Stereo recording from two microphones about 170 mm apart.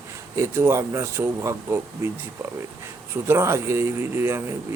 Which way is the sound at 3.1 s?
15° right (ahead or behind).